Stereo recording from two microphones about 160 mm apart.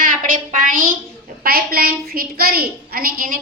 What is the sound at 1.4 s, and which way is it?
A woman's voice, 70° right (ahead or behind).